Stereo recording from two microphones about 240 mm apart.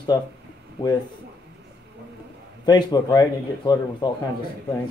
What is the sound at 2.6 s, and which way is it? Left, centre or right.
Speech, centre.